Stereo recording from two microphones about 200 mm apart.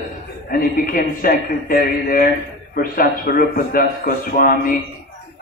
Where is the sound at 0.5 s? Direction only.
50° left (ahead or behind).